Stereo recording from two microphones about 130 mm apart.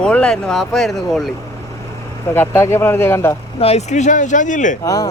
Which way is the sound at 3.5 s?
50° left (ahead or behind).